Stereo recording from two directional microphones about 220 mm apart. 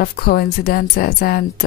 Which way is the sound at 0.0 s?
45° left (ahead or behind).